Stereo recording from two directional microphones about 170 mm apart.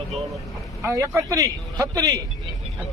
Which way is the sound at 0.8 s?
20° right (ahead or behind).